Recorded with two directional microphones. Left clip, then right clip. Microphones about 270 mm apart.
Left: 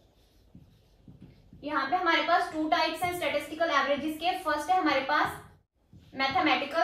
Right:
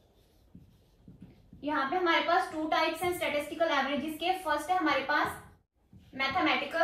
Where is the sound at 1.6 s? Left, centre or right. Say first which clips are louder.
Left 1 dB; centre.